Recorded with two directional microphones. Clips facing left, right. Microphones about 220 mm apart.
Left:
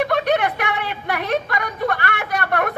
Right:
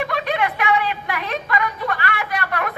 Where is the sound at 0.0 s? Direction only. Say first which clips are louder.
Left 4 dB; 50° left (ahead or behind).